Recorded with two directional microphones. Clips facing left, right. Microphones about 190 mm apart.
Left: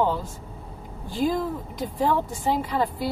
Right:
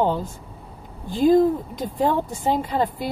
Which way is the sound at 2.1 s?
25° right (ahead or behind).